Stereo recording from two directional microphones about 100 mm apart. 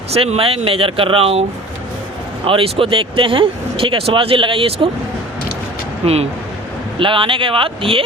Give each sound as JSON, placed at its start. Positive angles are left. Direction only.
{"t": 0.1, "sound": "speech", "side_deg": -80}
{"t": 7.0, "sound": "speech", "side_deg": -60}